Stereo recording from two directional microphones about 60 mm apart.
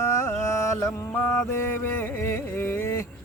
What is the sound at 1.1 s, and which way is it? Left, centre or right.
Carnatic music, left.